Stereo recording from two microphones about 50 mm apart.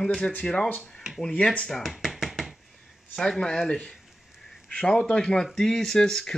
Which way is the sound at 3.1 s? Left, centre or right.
Centre.